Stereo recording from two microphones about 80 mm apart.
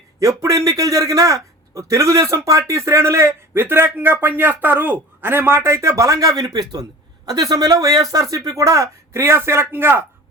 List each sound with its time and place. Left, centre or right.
0.4 s a man's voice: right